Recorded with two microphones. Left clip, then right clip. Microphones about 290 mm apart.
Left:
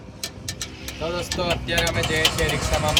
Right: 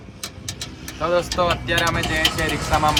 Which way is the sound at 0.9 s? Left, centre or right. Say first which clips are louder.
Right 7 dB; right.